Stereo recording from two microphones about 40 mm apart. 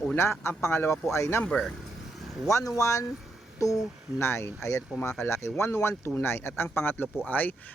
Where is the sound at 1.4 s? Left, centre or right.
Centre.